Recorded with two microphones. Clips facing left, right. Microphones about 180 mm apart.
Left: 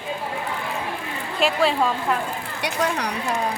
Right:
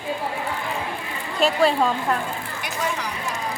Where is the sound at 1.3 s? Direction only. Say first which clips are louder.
Right 1 dB; centre (ahead or behind).